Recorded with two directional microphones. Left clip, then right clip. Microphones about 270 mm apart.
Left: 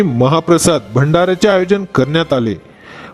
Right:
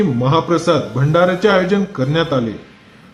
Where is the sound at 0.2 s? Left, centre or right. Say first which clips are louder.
Left 6 dB; left.